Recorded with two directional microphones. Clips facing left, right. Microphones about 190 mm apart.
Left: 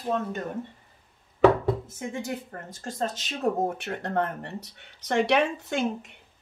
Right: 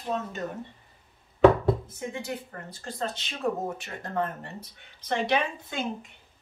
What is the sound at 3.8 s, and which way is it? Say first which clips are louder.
Speech: left 3 dB; 60° left (ahead or behind).